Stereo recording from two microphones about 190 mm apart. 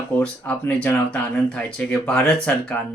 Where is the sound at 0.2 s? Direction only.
10° left (ahead or behind).